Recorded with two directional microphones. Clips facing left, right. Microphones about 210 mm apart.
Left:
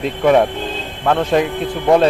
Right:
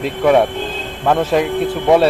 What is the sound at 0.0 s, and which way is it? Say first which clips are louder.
A man's voice: even; centre (ahead or behind).